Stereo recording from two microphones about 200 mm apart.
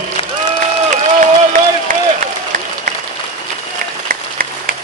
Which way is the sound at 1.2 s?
40° right (ahead or behind).